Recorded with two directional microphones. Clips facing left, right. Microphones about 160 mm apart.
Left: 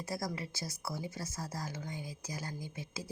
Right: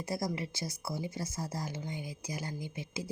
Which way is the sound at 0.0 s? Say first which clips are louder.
Right 3 dB; 20° right (ahead or behind).